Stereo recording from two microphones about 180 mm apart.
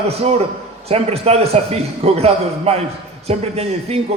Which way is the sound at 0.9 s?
35° right (ahead or behind).